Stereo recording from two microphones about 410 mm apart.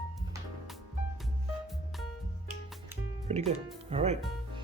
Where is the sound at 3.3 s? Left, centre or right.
Centre.